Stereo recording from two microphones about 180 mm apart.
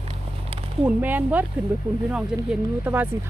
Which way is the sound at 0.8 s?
10° right (ahead or behind).